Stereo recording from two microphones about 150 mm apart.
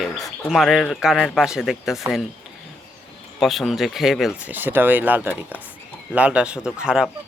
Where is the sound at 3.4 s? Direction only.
Centre (ahead or behind).